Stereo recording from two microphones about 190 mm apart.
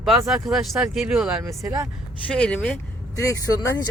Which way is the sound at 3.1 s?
15° left (ahead or behind).